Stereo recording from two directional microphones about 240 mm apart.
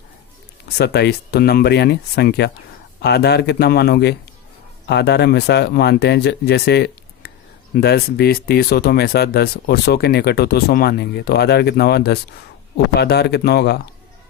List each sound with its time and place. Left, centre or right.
0.8 s speech: left